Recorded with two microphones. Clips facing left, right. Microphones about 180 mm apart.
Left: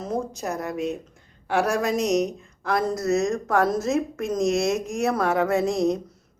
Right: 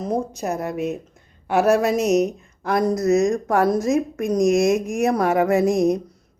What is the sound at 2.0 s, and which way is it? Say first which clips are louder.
Speech: right 4 dB; centre (ahead or behind).